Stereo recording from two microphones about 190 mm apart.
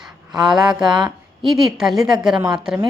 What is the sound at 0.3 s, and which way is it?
A woman's voice, centre (ahead or behind).